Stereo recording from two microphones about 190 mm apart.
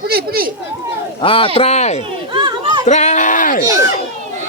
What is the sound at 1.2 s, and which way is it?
Speech, 30° left (ahead or behind).